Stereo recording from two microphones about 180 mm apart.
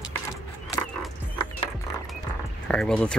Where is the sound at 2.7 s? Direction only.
5° left (ahead or behind).